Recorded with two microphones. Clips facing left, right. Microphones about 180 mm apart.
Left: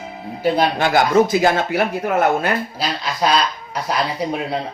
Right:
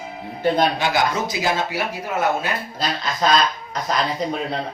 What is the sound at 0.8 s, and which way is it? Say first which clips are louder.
Speech: left 7 dB; 50° left (ahead or behind).